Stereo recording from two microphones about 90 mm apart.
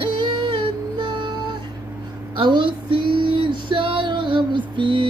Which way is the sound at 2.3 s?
65° right (ahead or behind).